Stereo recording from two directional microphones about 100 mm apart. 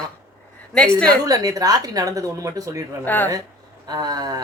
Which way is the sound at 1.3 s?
35° right (ahead or behind).